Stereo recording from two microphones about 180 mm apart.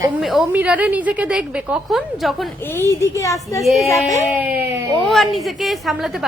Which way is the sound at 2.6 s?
15° left (ahead or behind).